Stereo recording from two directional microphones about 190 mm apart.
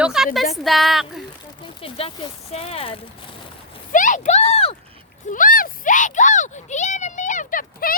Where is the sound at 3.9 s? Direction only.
45° left (ahead or behind).